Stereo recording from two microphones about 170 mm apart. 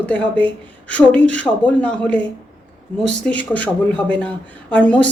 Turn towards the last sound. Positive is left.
turn(degrees=5)  # may be behind; listen again after turning